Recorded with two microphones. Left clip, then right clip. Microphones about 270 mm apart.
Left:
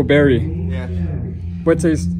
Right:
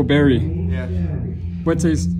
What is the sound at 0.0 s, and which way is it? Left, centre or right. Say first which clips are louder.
A man's voice: left 3 dB; centre.